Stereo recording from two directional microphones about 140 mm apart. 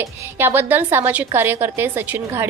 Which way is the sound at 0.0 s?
15° right (ahead or behind).